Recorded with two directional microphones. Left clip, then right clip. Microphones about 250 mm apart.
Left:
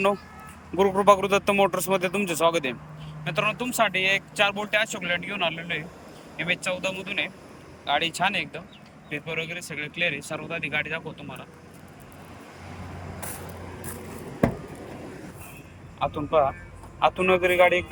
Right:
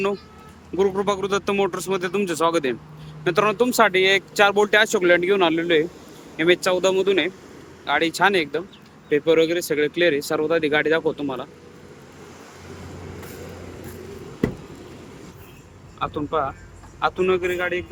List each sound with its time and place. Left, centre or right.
0.8 s speech: centre; by 11.0 s right
16.0 s speech: centre